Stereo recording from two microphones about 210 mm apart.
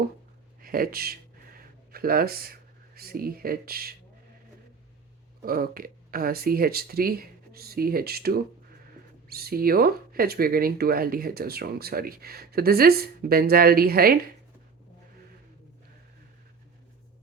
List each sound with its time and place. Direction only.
0.6 s speech: 45° right (ahead or behind)
5.5 s speech: 45° right (ahead or behind)